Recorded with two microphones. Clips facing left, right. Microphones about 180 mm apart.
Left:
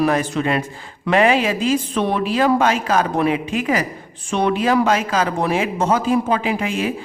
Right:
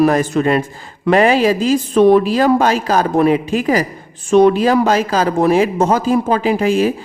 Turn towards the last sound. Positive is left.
turn(degrees=-35)  # may be behind; listen again after turning